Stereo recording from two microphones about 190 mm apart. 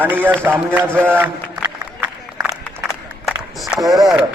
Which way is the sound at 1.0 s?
10° right (ahead or behind).